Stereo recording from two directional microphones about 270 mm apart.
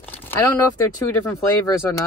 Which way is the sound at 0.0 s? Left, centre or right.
Centre.